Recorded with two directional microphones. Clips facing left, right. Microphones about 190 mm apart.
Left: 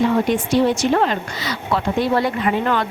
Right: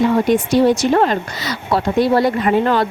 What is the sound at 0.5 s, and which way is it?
A woman's voice, 40° right (ahead or behind).